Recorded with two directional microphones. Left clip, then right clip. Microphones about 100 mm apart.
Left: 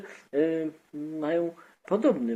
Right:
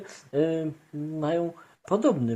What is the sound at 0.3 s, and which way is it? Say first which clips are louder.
Speech: right 1 dB; 35° right (ahead or behind).